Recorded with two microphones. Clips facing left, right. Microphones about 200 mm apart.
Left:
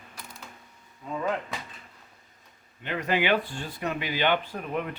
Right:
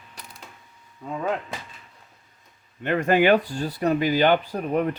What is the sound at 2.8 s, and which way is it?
Speech, 50° right (ahead or behind).